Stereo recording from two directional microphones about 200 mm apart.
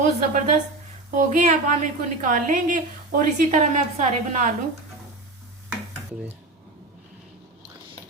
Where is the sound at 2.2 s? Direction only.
40° right (ahead or behind).